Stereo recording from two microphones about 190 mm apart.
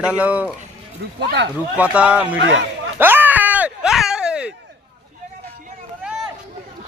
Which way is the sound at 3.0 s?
10° right (ahead or behind).